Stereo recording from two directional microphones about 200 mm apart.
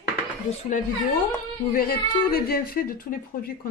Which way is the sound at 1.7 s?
45° left (ahead or behind).